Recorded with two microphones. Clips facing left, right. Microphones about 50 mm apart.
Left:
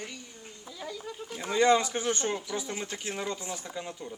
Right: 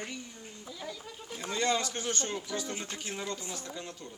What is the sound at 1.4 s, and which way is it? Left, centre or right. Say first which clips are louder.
Speech: left 7 dB; centre.